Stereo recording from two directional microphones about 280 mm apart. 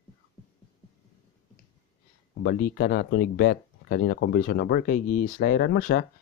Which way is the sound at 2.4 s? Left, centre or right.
Left.